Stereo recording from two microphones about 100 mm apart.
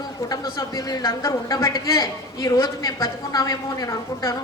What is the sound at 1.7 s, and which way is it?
A woman's voice, 45° left (ahead or behind).